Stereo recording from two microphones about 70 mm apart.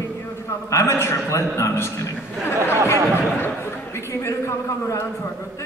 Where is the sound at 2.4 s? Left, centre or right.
Left.